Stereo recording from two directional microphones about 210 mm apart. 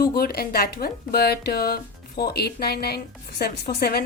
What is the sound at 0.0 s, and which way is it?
Speech, 45° left (ahead or behind).